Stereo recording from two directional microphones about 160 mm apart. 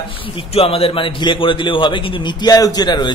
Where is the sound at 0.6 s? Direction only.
35° left (ahead or behind).